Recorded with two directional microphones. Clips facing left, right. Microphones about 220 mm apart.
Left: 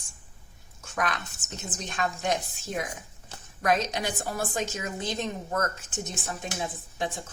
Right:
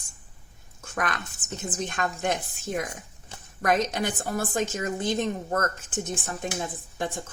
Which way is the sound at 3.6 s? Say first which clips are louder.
Right 2 dB; 50° right (ahead or behind).